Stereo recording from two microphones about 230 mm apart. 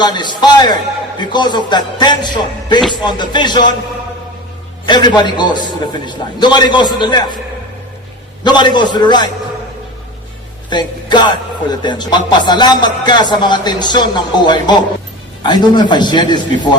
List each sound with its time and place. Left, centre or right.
0.0 s speech: centre
4.9 s speech: centre
8.4 s speech: centre
10.7 s speech: centre